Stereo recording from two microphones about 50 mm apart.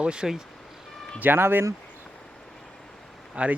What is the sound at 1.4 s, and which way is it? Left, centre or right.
Speech, right.